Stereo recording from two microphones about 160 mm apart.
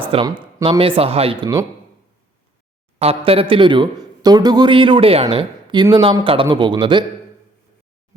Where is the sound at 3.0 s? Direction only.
35° right (ahead or behind).